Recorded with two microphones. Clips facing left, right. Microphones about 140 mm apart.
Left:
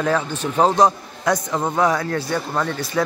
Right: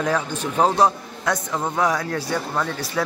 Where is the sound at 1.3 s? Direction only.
10° left (ahead or behind).